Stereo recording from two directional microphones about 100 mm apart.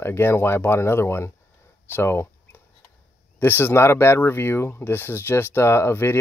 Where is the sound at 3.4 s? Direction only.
20° left (ahead or behind).